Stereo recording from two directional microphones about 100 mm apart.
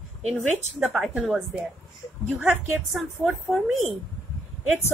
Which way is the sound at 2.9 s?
Centre (ahead or behind).